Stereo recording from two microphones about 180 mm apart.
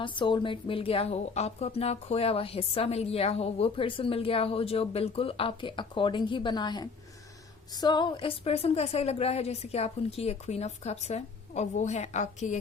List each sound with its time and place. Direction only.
0.0 s a woman's voice: 25° left (ahead or behind)